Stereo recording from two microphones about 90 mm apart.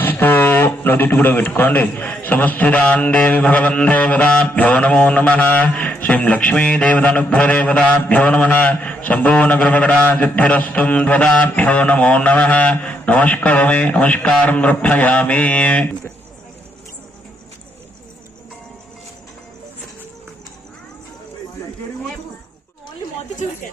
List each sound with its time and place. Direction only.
0.0 s speech: 20° left (ahead or behind)